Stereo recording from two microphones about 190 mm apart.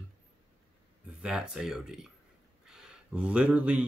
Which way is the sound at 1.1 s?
5° right (ahead or behind).